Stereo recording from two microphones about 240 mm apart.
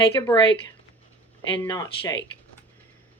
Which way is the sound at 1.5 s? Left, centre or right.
Centre.